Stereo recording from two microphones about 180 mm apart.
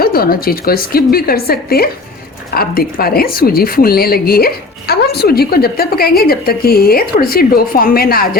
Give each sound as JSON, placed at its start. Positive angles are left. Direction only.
{"t": 0.0, "sound": "a woman's voice", "side_deg": 55}